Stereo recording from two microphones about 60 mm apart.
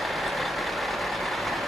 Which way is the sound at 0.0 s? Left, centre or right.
Centre.